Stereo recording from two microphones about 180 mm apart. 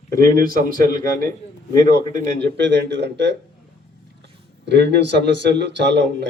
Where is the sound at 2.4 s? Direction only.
75° right (ahead or behind).